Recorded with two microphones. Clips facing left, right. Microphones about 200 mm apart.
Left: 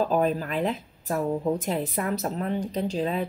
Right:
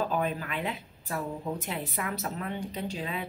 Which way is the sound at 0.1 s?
40° left (ahead or behind).